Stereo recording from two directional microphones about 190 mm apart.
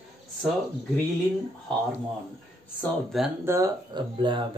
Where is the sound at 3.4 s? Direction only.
15° right (ahead or behind).